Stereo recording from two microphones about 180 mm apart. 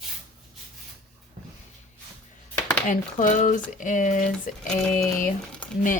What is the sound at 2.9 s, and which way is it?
Speech, 45° left (ahead or behind).